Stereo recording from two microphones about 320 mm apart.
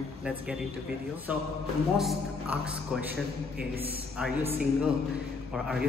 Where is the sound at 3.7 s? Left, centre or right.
Centre.